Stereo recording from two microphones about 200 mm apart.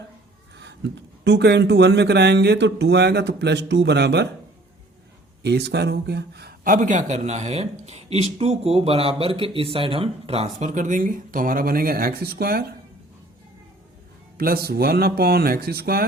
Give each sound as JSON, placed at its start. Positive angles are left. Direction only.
{"t": 0.5, "sound": "speech", "side_deg": -60}
{"t": 5.4, "sound": "speech", "side_deg": -55}
{"t": 14.3, "sound": "speech", "side_deg": -50}